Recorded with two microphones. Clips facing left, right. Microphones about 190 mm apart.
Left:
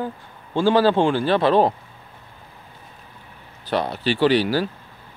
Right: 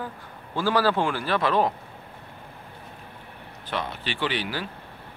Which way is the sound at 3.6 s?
35° left (ahead or behind).